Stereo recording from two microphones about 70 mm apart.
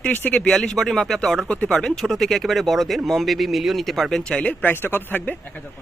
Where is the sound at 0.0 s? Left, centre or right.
Left.